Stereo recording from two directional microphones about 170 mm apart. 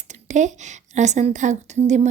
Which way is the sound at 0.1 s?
45° right (ahead or behind).